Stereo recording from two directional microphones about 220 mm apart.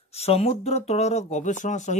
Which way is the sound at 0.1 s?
30° left (ahead or behind).